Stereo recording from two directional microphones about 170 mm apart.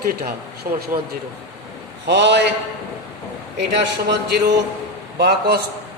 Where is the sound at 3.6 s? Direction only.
90° right.